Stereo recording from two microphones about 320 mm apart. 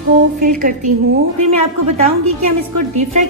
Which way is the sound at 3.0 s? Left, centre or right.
Right.